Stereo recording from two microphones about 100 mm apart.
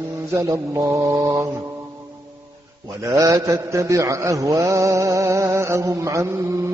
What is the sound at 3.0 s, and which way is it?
Mantra, 35° right (ahead or behind).